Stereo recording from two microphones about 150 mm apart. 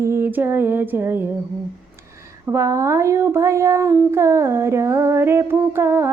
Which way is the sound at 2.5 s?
20° right (ahead or behind).